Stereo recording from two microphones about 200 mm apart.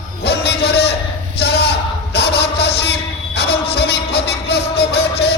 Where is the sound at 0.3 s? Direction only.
55° left (ahead or behind).